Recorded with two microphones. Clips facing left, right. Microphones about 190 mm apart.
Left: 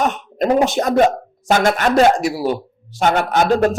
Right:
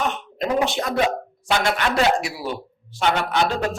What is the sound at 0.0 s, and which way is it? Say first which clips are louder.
Speech: left 6 dB; 45° left (ahead or behind).